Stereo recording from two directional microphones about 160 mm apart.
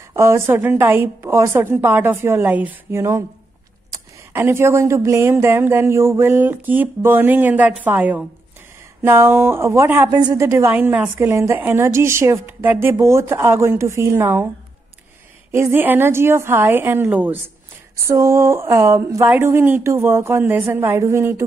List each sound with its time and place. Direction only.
0.0 s a woman's voice: 15° right (ahead or behind)
15.5 s a woman's voice: 15° right (ahead or behind)